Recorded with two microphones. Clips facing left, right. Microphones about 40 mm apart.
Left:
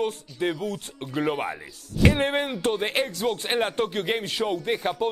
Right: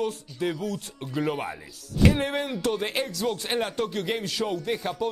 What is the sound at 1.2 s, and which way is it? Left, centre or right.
Speech, left.